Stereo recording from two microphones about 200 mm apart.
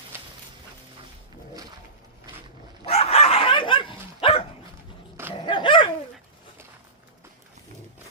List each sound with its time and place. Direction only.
2.8 s dog: 30° left (ahead or behind)